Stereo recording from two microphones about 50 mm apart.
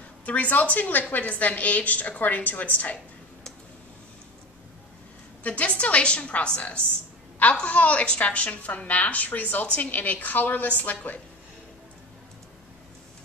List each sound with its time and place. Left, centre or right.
0.2 s a woman's voice: left
5.4 s a woman's voice: left